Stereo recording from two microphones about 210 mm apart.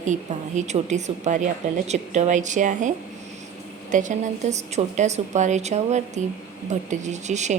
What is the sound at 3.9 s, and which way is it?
A woman's voice, 35° right (ahead or behind).